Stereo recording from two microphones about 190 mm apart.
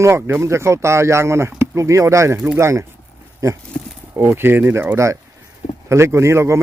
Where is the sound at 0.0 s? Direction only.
15° right (ahead or behind).